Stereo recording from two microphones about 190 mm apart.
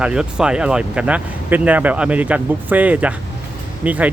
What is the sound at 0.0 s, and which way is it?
Speech, 5° right (ahead or behind).